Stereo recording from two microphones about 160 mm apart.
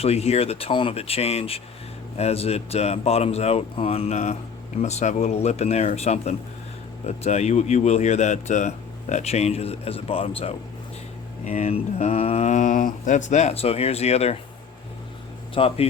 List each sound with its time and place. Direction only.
0.0 s speech: 40° left (ahead or behind)
15.5 s speech: 35° left (ahead or behind)